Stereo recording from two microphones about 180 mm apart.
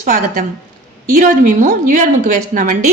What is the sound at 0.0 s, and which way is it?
A woman's voice, 50° right (ahead or behind).